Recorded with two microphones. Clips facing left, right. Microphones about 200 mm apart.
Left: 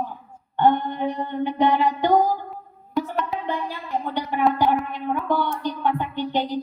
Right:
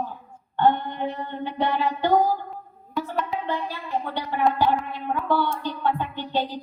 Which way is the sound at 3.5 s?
15° left (ahead or behind).